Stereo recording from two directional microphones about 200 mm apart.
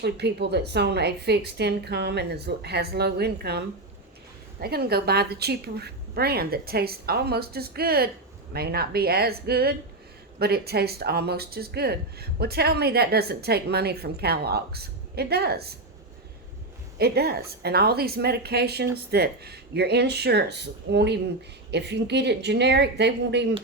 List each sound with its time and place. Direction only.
0.0 s a woman's voice: 55° right (ahead or behind)
4.6 s speech: 50° right (ahead or behind)
17.0 s a woman's voice: 50° right (ahead or behind)